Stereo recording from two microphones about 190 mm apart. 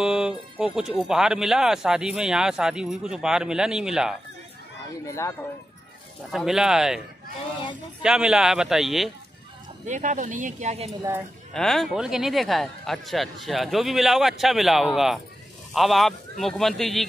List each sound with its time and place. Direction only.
0.0 s a sound: 5° right (ahead or behind)
0.6 s speech: 5° right (ahead or behind)
5.0 s speech: 15° left (ahead or behind)
6.3 s speech: centre (ahead or behind)
8.0 s speech: 5° right (ahead or behind)
9.8 s speech: 40° right (ahead or behind)
11.5 s speech: centre (ahead or behind)